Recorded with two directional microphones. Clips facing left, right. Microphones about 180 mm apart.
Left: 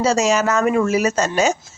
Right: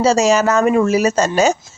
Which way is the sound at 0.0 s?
30° right (ahead or behind).